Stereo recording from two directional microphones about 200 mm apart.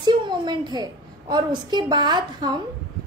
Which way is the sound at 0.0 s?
20° right (ahead or behind).